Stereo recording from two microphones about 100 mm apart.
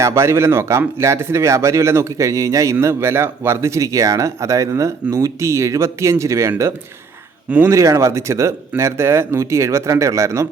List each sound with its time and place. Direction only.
0.0 s speech: 25° right (ahead or behind)